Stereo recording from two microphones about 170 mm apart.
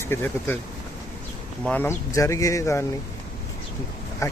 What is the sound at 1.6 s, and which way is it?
Speech, 10° left (ahead or behind).